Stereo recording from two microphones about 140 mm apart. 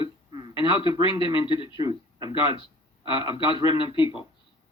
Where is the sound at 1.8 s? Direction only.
25° right (ahead or behind).